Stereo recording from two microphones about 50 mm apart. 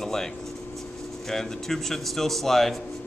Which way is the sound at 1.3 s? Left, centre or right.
Centre.